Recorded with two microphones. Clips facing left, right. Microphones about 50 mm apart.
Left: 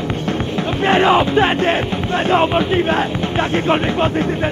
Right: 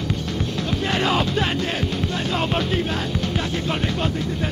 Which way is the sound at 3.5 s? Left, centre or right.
Left.